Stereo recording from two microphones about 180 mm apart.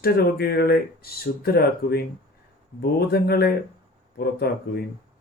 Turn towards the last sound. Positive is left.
turn(degrees=60)  # may be behind; listen again after turning